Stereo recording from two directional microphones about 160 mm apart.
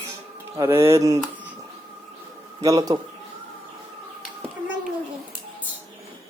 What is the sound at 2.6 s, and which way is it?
Speech, 20° right (ahead or behind).